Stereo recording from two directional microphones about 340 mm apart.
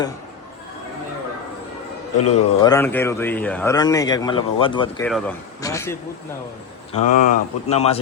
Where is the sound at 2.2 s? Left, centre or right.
Centre.